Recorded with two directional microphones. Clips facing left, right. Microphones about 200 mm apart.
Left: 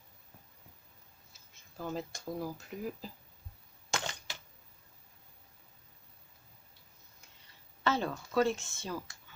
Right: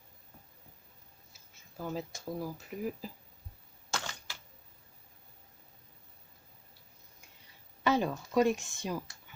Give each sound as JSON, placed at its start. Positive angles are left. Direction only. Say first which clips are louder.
{"t": 1.8, "sound": "speech", "louder": "right 1 dB", "side_deg": -5}
{"t": 3.9, "sound": "typewriter", "louder": "left 2 dB", "side_deg": 20}
{"t": 7.9, "sound": "speech", "louder": "right 3 dB", "side_deg": -15}